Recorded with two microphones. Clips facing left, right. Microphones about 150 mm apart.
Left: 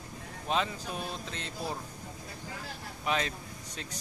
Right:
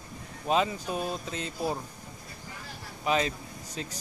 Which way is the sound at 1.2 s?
5° right (ahead or behind).